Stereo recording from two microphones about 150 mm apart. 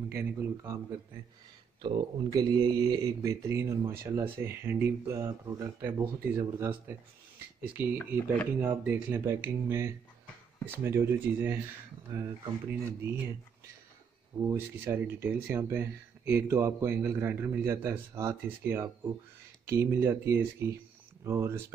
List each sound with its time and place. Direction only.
0.1 s speech: 15° right (ahead or behind)
1.8 s speech: 30° right (ahead or behind); by 13.3 s 15° right (ahead or behind)
14.5 s speech: 15° right (ahead or behind)